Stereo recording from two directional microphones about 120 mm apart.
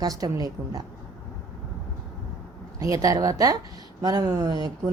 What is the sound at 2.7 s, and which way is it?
A woman's voice, 30° right (ahead or behind).